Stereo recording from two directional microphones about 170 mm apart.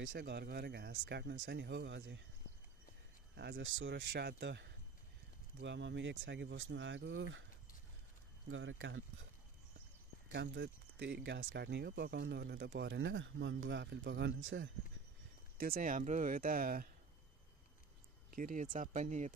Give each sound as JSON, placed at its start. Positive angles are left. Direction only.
{"t": 0.0, "sound": "speech", "side_deg": -85}
{"t": 3.3, "sound": "speech", "side_deg": -85}
{"t": 8.5, "sound": "speech", "side_deg": -90}
{"t": 10.3, "sound": "speech", "side_deg": -90}
{"t": 15.5, "sound": "speech", "side_deg": -60}
{"t": 18.3, "sound": "speech", "side_deg": -55}